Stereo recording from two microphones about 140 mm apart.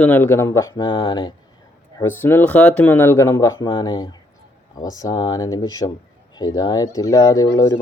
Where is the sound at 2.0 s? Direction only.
15° left (ahead or behind).